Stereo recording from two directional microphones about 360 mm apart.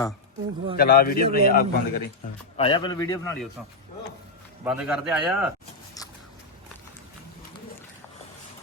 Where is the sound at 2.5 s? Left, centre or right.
Centre.